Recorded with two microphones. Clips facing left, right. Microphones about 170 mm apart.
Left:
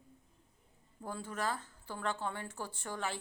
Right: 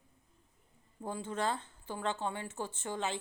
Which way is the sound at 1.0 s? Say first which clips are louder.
Right 3 dB; 20° right (ahead or behind).